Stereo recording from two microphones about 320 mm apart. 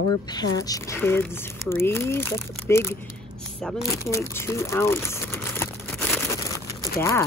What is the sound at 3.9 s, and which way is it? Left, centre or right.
Crumpling, centre.